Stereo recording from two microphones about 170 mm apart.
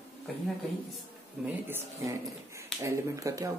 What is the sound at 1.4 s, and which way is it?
Speech, 10° right (ahead or behind).